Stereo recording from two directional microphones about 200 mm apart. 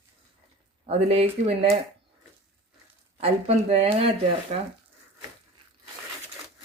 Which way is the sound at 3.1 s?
30° right (ahead or behind).